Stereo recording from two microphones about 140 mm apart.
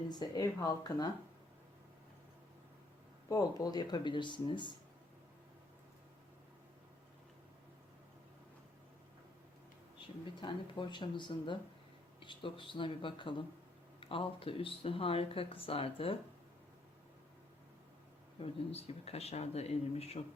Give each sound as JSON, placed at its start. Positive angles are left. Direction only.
{"t": 0.1, "sound": "speech", "side_deg": 30}
{"t": 3.2, "sound": "speech", "side_deg": 25}
{"t": 10.4, "sound": "speech", "side_deg": 35}
{"t": 18.4, "sound": "speech", "side_deg": 45}